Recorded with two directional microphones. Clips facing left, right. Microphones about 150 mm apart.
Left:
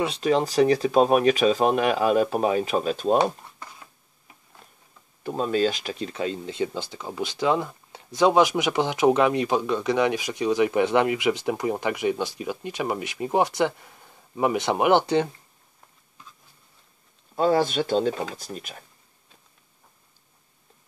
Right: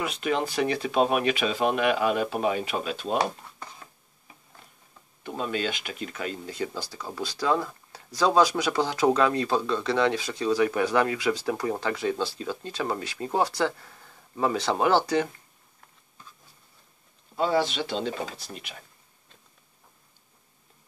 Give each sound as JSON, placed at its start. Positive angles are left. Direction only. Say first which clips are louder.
{"t": 0.0, "sound": "speech", "louder": "left 5 dB", "side_deg": 35}
{"t": 5.2, "sound": "speech", "louder": "left 6 dB", "side_deg": 35}
{"t": 17.4, "sound": "speech", "louder": "left 4 dB", "side_deg": 45}